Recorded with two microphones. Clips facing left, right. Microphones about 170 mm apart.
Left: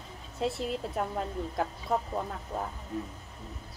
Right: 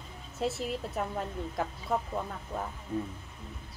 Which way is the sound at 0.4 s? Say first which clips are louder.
Left 1 dB; centre (ahead or behind).